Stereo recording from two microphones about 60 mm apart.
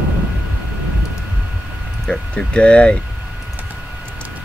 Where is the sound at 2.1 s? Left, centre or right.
Centre.